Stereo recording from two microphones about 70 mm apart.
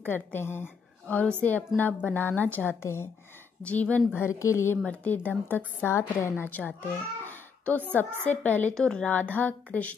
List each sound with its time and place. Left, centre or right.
0.0 s a woman's voice: left
1.0 s a woman's voice: centre
2.8 s a woman's voice: left
3.6 s a woman's voice: left
4.2 s a woman's voice: left
4.8 s a woman's voice: left
5.9 s a child's voice: left
8.7 s speech: centre
9.1 s a woman's voice: left